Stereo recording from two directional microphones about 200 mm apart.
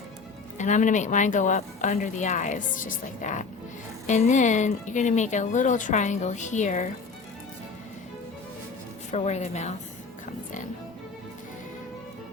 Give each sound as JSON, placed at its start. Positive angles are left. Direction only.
{"t": 0.6, "sound": "speech", "side_deg": 40}
{"t": 9.1, "sound": "speech", "side_deg": 35}